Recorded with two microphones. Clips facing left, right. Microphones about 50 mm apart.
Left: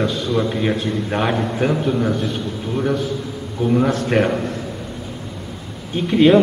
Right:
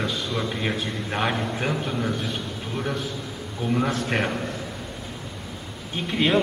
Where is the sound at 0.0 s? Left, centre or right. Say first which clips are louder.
Left 8 dB; centre.